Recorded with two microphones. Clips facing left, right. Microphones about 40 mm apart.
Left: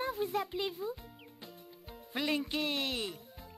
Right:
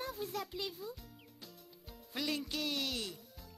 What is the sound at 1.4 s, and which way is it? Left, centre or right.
Music, left.